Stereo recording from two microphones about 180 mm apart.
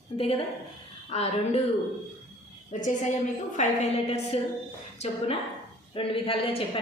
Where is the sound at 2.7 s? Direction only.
40° left (ahead or behind).